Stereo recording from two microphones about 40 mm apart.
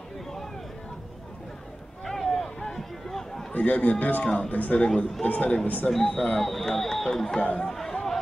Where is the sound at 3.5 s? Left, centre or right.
Left.